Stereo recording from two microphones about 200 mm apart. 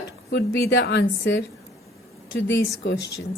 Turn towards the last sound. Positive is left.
turn(degrees=60)  # may be behind; listen again after turning